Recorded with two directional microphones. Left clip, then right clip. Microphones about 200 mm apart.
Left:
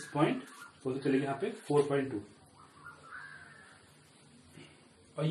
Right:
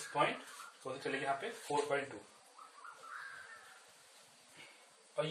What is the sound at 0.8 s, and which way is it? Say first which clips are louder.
Speech: left 8 dB; 10° left (ahead or behind).